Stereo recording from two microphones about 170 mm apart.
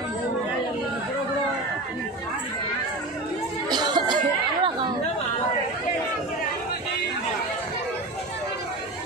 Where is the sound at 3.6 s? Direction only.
25° right (ahead or behind).